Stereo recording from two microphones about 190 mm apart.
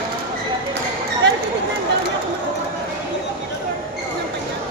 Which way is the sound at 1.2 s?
65° right (ahead or behind).